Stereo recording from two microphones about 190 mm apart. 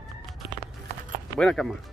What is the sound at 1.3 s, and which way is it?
Speech, 5° left (ahead or behind).